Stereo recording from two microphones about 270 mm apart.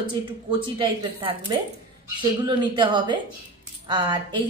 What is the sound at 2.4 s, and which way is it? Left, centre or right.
A woman's voice, centre.